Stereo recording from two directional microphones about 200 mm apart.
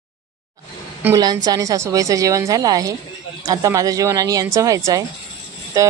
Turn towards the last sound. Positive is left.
turn(degrees=-15)  # may be behind; listen again after turning